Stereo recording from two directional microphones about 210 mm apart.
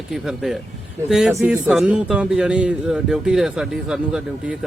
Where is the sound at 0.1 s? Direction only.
Centre (ahead or behind).